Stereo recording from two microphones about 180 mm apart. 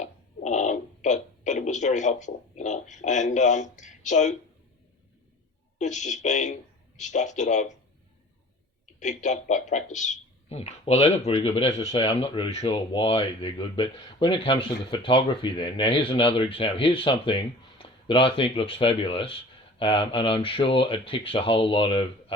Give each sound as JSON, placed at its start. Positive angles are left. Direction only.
{"t": 0.0, "sound": "speech", "side_deg": 40}
{"t": 5.8, "sound": "speech", "side_deg": 40}
{"t": 9.0, "sound": "speech", "side_deg": 40}